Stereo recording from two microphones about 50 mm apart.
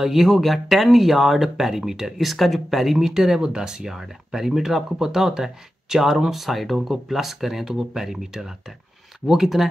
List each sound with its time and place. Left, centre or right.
0.0 s speech: centre